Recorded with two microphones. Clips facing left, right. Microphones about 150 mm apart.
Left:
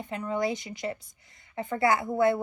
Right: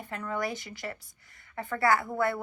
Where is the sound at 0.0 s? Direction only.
20° left (ahead or behind).